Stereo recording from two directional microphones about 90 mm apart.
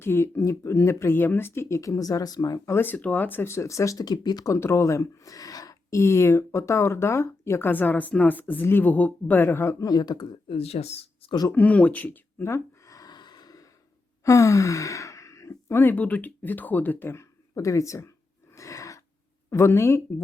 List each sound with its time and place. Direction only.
0.0 s speech: 30° left (ahead or behind); by 2.6 s 45° left (ahead or behind)
2.6 s speech: 25° left (ahead or behind); by 4.5 s 50° left (ahead or behind)
4.5 s speech: 30° left (ahead or behind); by 10.2 s 50° left (ahead or behind)
10.5 s speech: 90° left
11.5 s a sound: 15° left (ahead or behind); by 13.7 s 45° left (ahead or behind)
14.3 s sigh: 35° left (ahead or behind)
15.8 s speech: 20° left (ahead or behind)
17.5 s speech: 35° left (ahead or behind)
18.5 s a sound: 35° left (ahead or behind)
19.5 s speech: 30° left (ahead or behind)